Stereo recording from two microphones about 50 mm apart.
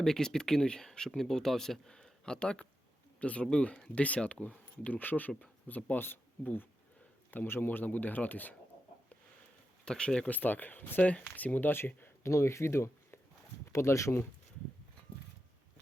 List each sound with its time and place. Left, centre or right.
0.0 s a man's voice: centre; by 8.5 s left
9.8 s speech: centre
10.2 s speech: left
12.2 s speech: left
13.7 s speech: left